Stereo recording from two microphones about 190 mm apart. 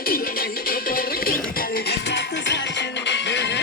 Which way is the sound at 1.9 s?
65° left (ahead or behind).